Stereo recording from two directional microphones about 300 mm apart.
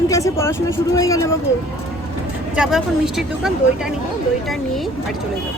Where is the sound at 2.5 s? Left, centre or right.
Centre.